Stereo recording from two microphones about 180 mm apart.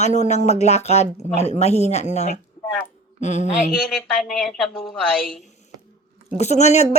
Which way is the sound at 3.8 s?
Centre (ahead or behind).